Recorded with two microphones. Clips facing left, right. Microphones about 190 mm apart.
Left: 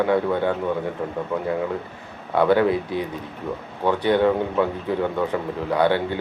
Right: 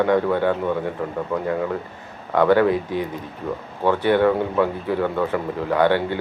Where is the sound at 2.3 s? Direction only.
10° left (ahead or behind).